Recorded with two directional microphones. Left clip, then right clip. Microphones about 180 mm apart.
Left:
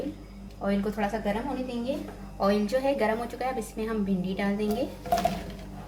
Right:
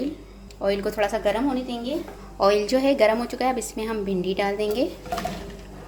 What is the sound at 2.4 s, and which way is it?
A woman's voice, 45° right (ahead or behind).